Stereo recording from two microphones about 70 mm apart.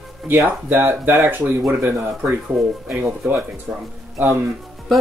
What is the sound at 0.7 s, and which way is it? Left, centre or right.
Speech, right.